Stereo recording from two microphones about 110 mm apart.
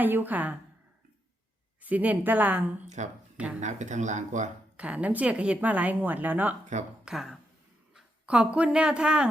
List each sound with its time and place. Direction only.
0.0 s speech: 15° right (ahead or behind)
1.8 s speech: 15° right (ahead or behind)
2.8 s speech: 90° right
3.3 s speech: 10° right (ahead or behind)
3.6 s speech: 90° right
4.8 s speech: 10° right (ahead or behind)
7.0 s speech: 5° right (ahead or behind)